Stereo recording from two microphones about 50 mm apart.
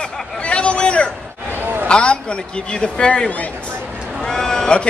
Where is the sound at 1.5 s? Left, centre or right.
Right.